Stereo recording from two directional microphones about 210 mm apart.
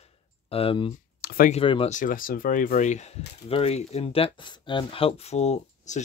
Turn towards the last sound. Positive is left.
turn(degrees=35)  # may be behind; listen again after turning